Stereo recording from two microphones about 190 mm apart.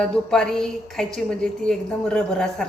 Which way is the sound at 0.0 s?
5° left (ahead or behind).